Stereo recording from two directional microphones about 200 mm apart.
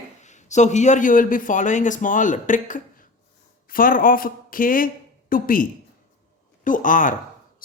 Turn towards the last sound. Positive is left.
turn(degrees=40)  # may be behind; listen again after turning